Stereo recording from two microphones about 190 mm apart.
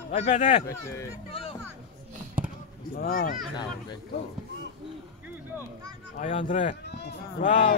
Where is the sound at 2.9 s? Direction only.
50° left (ahead or behind).